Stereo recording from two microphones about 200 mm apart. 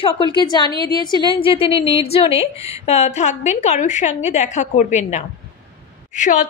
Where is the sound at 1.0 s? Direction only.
20° left (ahead or behind).